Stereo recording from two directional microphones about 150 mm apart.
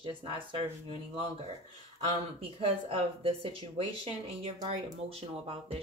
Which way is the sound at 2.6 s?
40° right (ahead or behind).